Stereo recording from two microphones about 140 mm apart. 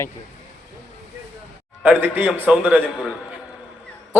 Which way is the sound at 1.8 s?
10° right (ahead or behind).